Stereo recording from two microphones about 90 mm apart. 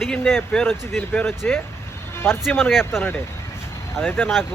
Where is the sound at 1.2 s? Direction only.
5° left (ahead or behind).